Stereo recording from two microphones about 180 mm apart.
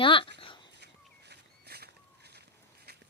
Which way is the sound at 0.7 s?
70° right (ahead or behind).